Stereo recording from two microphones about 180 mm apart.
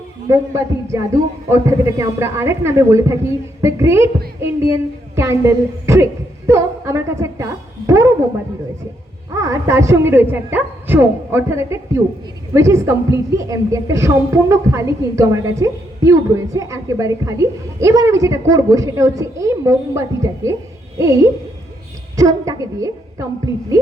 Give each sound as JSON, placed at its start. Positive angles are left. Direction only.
{"t": 0.3, "sound": "a woman's voice", "side_deg": -15}
{"t": 9.3, "sound": "a woman's voice", "side_deg": -15}